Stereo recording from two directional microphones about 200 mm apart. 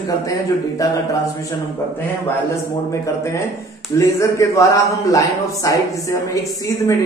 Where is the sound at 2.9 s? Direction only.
15° left (ahead or behind).